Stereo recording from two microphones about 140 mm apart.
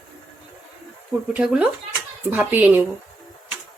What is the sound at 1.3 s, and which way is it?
Speech, 10° right (ahead or behind).